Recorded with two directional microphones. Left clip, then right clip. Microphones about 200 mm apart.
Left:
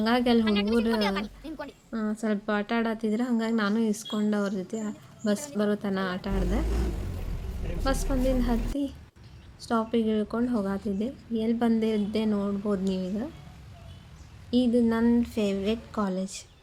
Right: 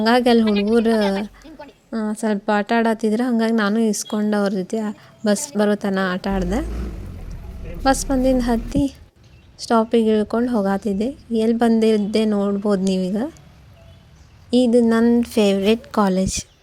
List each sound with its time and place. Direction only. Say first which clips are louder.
0.0 s a woman's voice: right 9 dB; 35° right (ahead or behind)
0.4 s a woman's voice: right 7 dB; 5° left (ahead or behind)
1.0 s a sound: right 7 dB; 15° left (ahead or behind)
1.9 s a woman's voice: right 8 dB; 35° right (ahead or behind)
7.9 s a woman's voice: right 10 dB; 35° right (ahead or behind)
14.5 s a woman's voice: right 9 dB; 35° right (ahead or behind)